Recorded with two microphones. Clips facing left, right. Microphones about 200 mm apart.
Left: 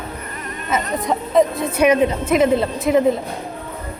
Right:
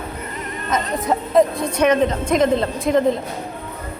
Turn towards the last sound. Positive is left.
turn(degrees=5)  # may be behind; listen again after turning